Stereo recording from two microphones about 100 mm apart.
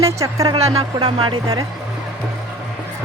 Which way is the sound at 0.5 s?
80° right.